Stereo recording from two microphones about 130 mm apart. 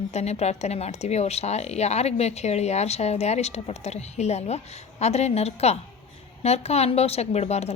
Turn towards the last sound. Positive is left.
turn(degrees=55)  # may be behind; listen again after turning